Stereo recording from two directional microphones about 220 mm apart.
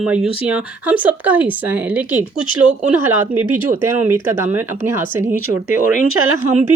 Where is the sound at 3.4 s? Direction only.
10° right (ahead or behind).